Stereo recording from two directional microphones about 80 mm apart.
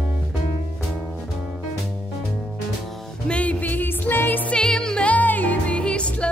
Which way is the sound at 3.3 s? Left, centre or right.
Centre.